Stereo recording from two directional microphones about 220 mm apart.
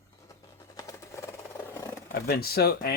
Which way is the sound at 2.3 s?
45° left (ahead or behind).